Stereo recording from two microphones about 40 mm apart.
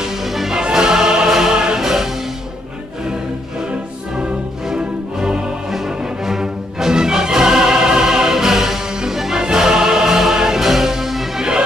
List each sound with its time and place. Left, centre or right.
0.1 s music: centre
0.6 s music: centre
1.8 s music: centre
4.2 s music: centre
5.7 s music: centre